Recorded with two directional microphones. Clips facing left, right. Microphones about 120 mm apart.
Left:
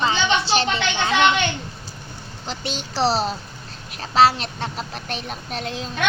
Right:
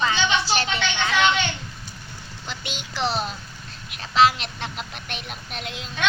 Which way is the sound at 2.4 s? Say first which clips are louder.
Left 6 dB; 35° left (ahead or behind).